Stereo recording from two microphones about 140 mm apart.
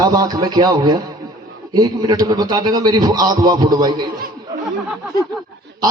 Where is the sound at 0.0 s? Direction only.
25° right (ahead or behind).